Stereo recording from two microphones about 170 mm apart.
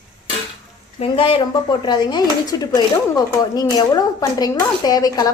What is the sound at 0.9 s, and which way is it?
Speech, 35° left (ahead or behind).